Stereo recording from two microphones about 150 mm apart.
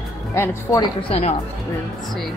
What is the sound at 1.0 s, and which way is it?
Speech, 45° left (ahead or behind).